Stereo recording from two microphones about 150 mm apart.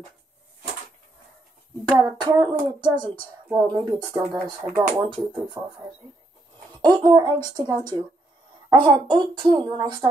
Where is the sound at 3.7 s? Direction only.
30° right (ahead or behind).